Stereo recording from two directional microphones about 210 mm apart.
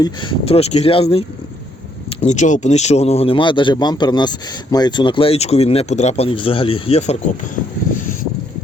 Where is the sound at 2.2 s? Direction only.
35° left (ahead or behind).